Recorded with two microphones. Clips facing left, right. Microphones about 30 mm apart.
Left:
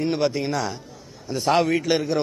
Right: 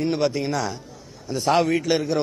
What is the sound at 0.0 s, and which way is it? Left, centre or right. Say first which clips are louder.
A man's voice: even; centre.